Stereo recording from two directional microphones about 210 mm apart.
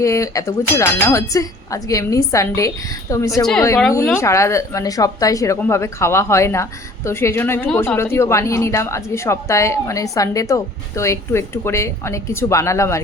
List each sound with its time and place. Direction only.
0.0 s a woman's voice: 15° left (ahead or behind)